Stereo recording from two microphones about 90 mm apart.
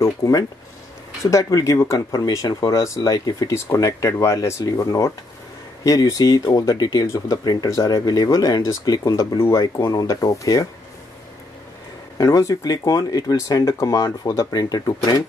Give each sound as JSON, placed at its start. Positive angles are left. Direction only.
{"t": 0.0, "sound": "speech", "side_deg": 40}
{"t": 9.4, "sound": "speech", "side_deg": 30}
{"t": 12.2, "sound": "speech", "side_deg": 40}